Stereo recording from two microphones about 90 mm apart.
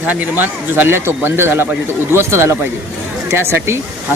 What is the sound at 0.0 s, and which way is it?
Speech, 15° right (ahead or behind).